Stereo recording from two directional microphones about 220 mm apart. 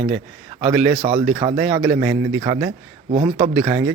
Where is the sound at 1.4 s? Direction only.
20° right (ahead or behind).